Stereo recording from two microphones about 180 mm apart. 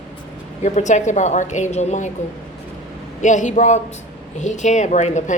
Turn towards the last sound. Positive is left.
turn(degrees=40)  # may be behind; listen again after turning